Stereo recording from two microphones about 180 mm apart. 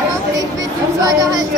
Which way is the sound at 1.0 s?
20° right (ahead or behind).